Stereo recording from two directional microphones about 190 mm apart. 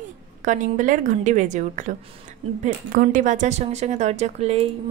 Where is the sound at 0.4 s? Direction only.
40° right (ahead or behind).